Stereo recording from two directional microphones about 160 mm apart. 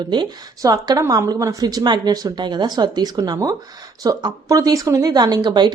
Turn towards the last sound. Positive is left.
turn(degrees=-25)  # may be behind; listen again after turning